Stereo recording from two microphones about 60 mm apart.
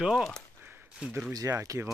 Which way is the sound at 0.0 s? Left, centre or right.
Centre.